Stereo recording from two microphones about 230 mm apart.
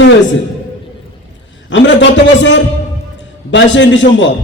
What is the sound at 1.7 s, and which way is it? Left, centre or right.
A man's voice, left.